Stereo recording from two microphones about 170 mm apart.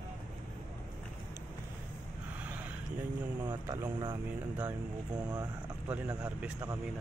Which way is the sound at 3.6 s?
15° right (ahead or behind).